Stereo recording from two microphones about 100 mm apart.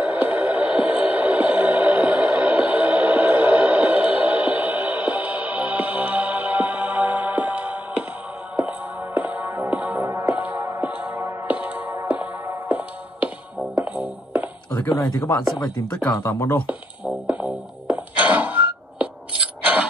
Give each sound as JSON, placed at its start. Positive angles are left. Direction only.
{"t": 0.0, "sound": "music", "side_deg": -15}
{"t": 10.0, "sound": "music", "side_deg": -30}
{"t": 10.3, "sound": "music", "side_deg": -15}
{"t": 14.8, "sound": "a sound", "side_deg": 25}
{"t": 15.0, "sound": "speech", "side_deg": 35}
{"t": 16.6, "sound": "music", "side_deg": -15}
{"t": 19.6, "sound": "a sound", "side_deg": -15}